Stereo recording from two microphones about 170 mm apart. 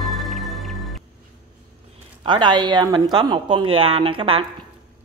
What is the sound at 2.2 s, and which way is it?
A woman's voice, 25° right (ahead or behind).